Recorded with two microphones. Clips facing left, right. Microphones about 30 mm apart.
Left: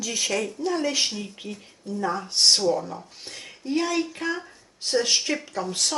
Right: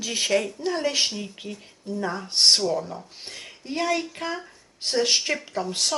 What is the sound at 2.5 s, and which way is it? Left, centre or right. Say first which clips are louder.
Speech: left 1 dB; centre.